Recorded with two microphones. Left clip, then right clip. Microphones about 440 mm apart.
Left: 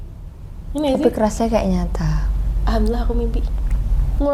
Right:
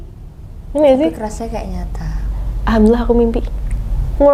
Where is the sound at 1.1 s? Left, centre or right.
Left.